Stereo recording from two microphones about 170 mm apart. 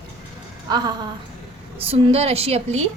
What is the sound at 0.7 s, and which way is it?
A woman's voice, 25° right (ahead or behind).